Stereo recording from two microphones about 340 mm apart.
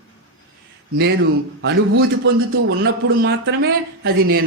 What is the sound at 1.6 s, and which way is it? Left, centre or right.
A man's voice, right.